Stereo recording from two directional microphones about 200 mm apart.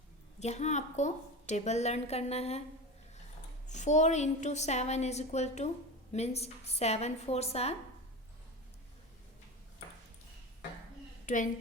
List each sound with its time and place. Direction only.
0.3 s a woman's voice: 35° left (ahead or behind)
3.7 s a woman's voice: 35° left (ahead or behind)
11.3 s a woman's voice: 40° left (ahead or behind)